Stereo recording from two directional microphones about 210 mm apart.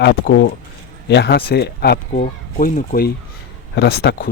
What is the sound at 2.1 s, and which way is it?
Speech, 40° left (ahead or behind).